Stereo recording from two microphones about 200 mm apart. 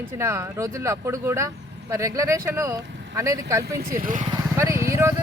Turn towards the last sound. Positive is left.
turn(degrees=-15)  # may be behind; listen again after turning